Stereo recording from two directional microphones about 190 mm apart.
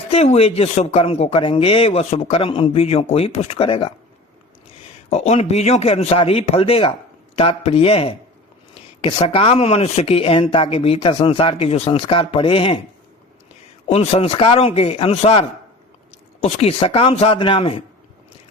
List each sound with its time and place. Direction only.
0.1 s speech: 35° left (ahead or behind)
5.1 s speech: 35° left (ahead or behind)
13.8 s speech: 35° left (ahead or behind)